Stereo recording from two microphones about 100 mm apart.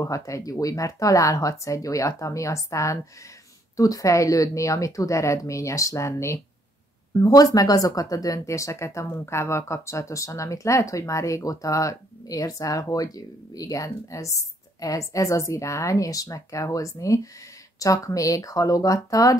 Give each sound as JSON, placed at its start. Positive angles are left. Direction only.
{"t": 0.0, "sound": "speech", "side_deg": 35}